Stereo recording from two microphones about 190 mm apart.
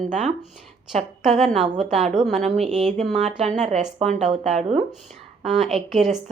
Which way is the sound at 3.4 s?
35° right (ahead or behind).